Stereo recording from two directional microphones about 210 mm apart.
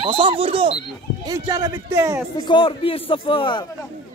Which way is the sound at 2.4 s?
25° left (ahead or behind).